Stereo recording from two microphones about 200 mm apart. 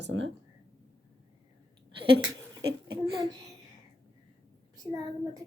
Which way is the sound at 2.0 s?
25° right (ahead or behind).